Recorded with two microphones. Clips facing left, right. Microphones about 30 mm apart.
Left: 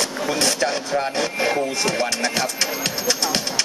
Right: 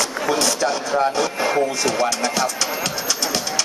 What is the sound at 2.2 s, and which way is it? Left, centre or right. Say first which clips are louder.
Speech: right 2 dB; left.